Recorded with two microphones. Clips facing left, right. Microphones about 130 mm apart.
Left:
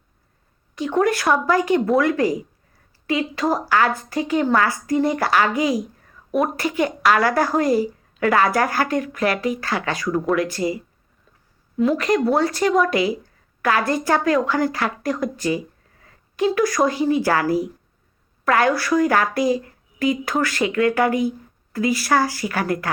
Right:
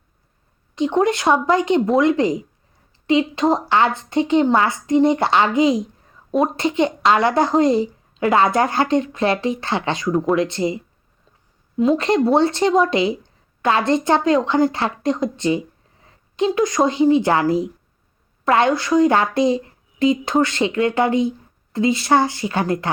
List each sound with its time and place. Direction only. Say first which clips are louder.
0.8 s a woman's voice: right 2 dB; 20° right (ahead or behind)